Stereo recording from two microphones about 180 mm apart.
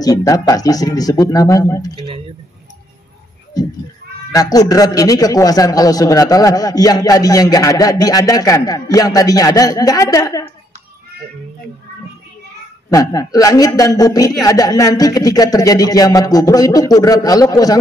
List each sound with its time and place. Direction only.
0.0 s a man's voice: 20° left (ahead or behind)
2.0 s a sound: 30° right (ahead or behind)
4.3 s a man's voice: 20° left (ahead or behind)
12.9 s a man's voice: 20° left (ahead or behind)